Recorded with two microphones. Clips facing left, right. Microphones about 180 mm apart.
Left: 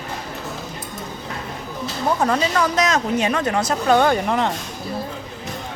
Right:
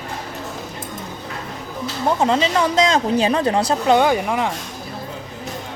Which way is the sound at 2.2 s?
25° right (ahead or behind).